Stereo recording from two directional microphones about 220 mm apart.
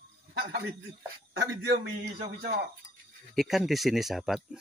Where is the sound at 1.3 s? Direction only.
50° right (ahead or behind).